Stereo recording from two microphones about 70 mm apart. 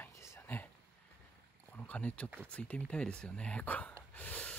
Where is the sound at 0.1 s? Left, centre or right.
Left.